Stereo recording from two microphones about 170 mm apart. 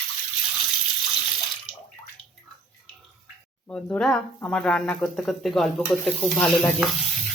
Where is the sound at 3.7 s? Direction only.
10° left (ahead or behind).